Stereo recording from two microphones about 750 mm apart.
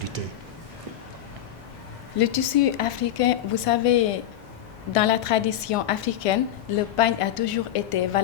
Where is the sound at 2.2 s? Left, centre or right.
Left.